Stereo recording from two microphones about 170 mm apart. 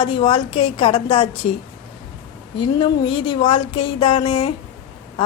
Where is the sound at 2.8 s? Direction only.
30° left (ahead or behind).